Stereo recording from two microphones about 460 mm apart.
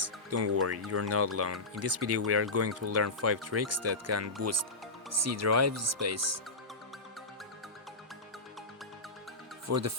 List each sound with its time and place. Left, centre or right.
0.0 s music: right
0.9 s speech: right
9.6 s speech: right